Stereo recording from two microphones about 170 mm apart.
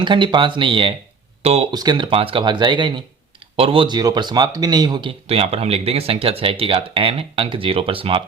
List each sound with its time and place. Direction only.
0.0 s speech: 25° right (ahead or behind)
1.7 s speech: 25° right (ahead or behind)